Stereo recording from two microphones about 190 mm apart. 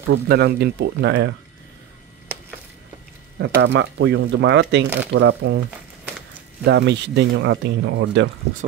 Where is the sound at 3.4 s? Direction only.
70° right (ahead or behind).